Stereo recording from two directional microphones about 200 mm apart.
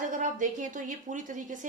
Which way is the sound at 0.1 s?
40° right (ahead or behind).